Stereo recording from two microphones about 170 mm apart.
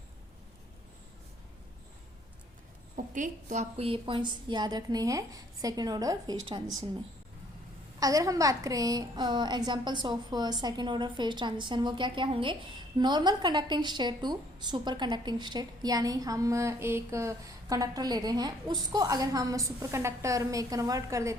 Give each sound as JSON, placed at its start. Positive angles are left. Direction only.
{"t": 2.9, "sound": "a woman's voice", "side_deg": -45}
{"t": 7.9, "sound": "a woman's voice", "side_deg": -20}